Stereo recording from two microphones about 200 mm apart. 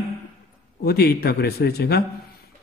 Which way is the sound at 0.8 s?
50° left (ahead or behind).